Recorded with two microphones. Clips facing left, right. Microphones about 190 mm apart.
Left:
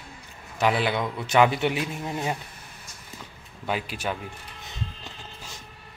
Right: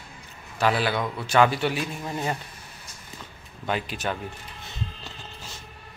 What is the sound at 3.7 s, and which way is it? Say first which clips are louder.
Speech: right 1 dB; 10° left (ahead or behind).